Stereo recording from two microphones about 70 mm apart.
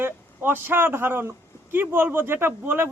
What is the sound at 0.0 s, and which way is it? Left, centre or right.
A man's voice, right.